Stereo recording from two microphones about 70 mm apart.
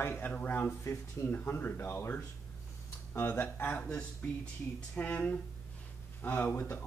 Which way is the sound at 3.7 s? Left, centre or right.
Centre.